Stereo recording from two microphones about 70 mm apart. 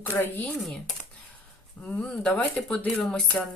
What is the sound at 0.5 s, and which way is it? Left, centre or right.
Speech, centre.